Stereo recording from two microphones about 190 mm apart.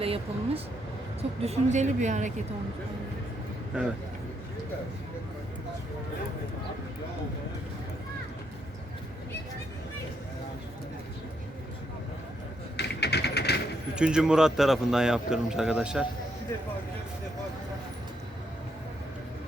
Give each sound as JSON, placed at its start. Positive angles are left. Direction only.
{"t": 0.0, "sound": "a woman's voice", "side_deg": -30}
{"t": 12.7, "sound": "music", "side_deg": 60}
{"t": 13.9, "sound": "speech", "side_deg": -5}